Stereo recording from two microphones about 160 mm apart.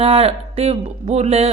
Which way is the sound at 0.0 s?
35° right (ahead or behind).